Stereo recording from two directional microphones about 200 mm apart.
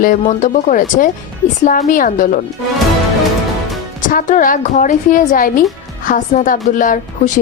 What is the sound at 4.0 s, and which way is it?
A woman's voice, 40° left (ahead or behind).